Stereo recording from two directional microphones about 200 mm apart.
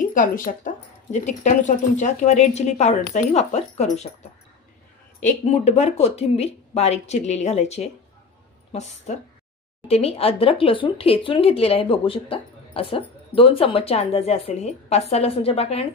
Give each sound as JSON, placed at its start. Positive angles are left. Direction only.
{"t": 0.0, "sound": "speech", "side_deg": 40}
{"t": 5.2, "sound": "speech", "side_deg": 35}